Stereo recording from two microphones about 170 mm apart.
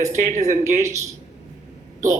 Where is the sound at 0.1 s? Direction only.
45° right (ahead or behind).